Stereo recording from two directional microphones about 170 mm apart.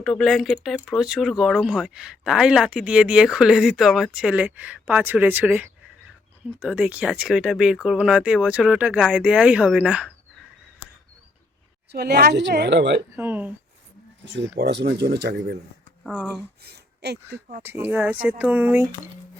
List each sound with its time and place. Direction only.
0.0 s speech: centre (ahead or behind)
11.9 s speech: 75° right (ahead or behind); by 13.0 s 90° right
13.1 s speech: 10° right (ahead or behind)
14.3 s speech: 90° right
16.6 s a sound: 75° right (ahead or behind)
17.6 s speech: 15° right (ahead or behind)